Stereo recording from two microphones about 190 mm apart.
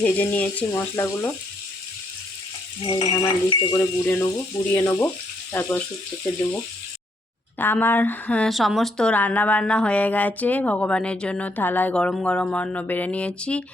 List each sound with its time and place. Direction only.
0.0 s speech: 10° left (ahead or behind)
3.0 s speech: 20° left (ahead or behind)
7.6 s speech: 10° left (ahead or behind)